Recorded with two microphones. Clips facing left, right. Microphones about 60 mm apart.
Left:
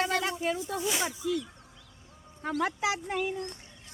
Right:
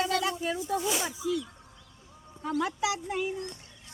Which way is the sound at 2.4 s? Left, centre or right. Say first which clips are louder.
Even; left.